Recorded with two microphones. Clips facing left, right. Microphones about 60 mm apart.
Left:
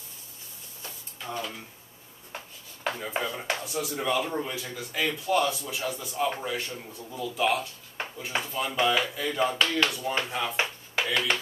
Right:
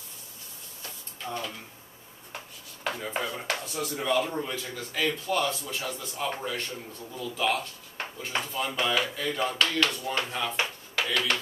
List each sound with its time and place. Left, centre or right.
1.2 s speech: centre
2.8 s speech: centre